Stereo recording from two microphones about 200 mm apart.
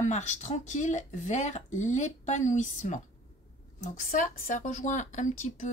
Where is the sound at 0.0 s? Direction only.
35° left (ahead or behind).